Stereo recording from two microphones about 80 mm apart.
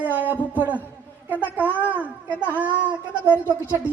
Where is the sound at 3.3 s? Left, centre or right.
Left.